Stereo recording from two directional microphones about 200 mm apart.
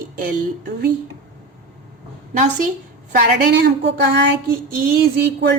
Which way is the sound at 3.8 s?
60° right (ahead or behind).